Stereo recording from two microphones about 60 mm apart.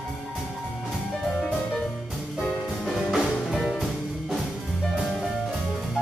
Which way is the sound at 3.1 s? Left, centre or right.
Centre.